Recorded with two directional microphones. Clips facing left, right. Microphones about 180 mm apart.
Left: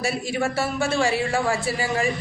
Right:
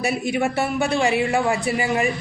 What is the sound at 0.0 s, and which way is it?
A woman's voice, 20° right (ahead or behind).